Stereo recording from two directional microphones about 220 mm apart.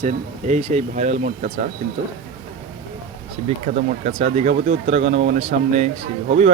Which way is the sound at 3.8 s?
30° right (ahead or behind).